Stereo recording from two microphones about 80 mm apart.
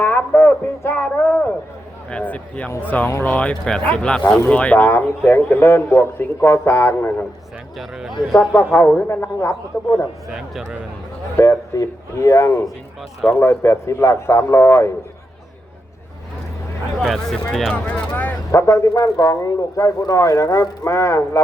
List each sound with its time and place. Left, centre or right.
0.0 s music: left
0.8 s a sound: left
2.0 s a man's voice: centre
4.9 s a man's voice: left
7.8 s speech: centre
8.5 s a man's voice: left
9.0 s speech: left
10.2 s speech: centre
11.4 s speech: left
17.0 s speech: centre
17.8 s vehicle: left
18.5 s speech: left